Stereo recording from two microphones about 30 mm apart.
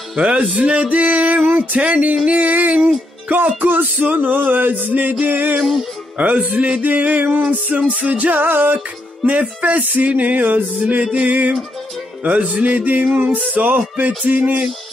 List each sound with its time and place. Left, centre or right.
0.1 s music: right
3.6 s music: right
5.6 s music: centre
6.1 s music: right
6.8 s a sound: right
7.2 s music: right
8.7 s music: right
11.1 s music: right
12.2 s music: right
13.2 s music: right